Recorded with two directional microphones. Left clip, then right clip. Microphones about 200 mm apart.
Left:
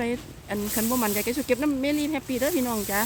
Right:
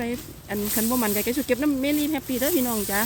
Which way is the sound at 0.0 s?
Centre (ahead or behind).